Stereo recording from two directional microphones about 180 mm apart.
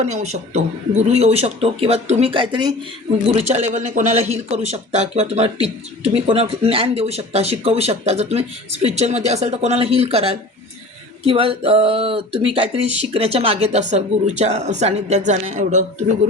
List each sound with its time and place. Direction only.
0.0 s speech: 40° right (ahead or behind)
3.3 s speech: 40° right (ahead or behind)